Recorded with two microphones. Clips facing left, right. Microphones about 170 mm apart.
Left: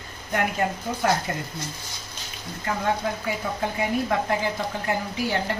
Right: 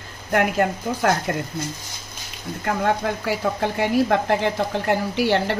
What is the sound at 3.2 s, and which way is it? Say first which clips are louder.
A woman's voice: right 5 dB; 75° right (ahead or behind).